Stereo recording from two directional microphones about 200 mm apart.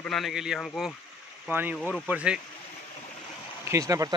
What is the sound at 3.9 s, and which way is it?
Speech, 15° right (ahead or behind).